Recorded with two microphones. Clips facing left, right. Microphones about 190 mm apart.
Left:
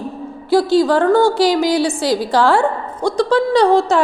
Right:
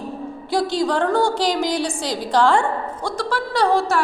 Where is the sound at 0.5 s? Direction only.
5° left (ahead or behind).